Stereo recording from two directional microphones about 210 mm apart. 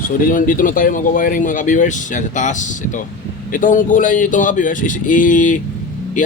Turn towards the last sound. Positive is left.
turn(degrees=35)  # may be behind; listen again after turning